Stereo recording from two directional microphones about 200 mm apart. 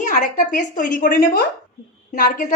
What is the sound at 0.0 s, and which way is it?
A woman's voice, 40° left (ahead or behind).